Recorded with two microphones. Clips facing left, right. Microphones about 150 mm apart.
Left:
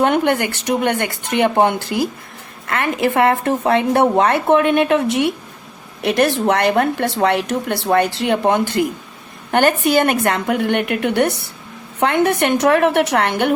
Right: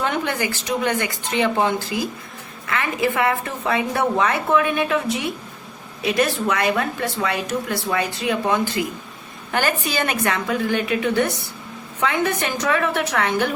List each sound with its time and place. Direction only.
0.0 s a woman's voice: 60° left (ahead or behind)